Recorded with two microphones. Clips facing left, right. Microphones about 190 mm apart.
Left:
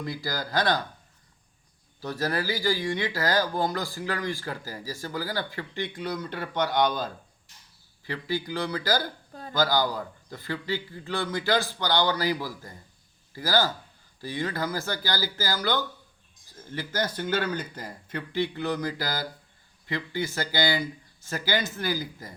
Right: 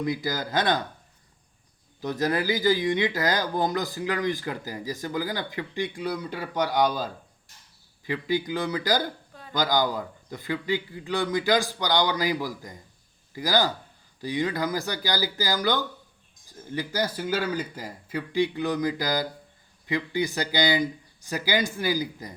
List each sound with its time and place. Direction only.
0.0 s speech: 20° right (ahead or behind)
2.0 s speech: 20° right (ahead or behind)
8.0 s a man's voice: 20° right (ahead or behind)